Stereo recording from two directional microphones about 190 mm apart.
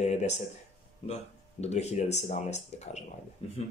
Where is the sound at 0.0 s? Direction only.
35° left (ahead or behind).